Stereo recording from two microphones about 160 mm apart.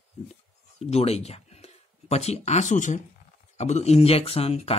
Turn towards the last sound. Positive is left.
turn(degrees=40)  # may be behind; listen again after turning